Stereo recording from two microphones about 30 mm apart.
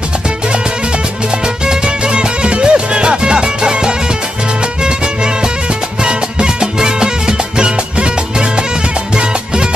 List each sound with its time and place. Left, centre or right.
2.0 s music: right
6.0 s music: right